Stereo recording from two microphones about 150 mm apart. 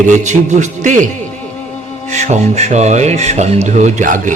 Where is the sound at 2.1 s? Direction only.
50° right (ahead or behind).